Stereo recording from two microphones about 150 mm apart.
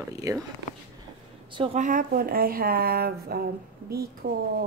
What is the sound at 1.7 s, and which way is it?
A woman's voice, 65° right (ahead or behind).